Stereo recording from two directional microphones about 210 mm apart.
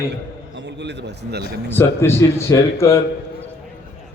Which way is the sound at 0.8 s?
55° right (ahead or behind).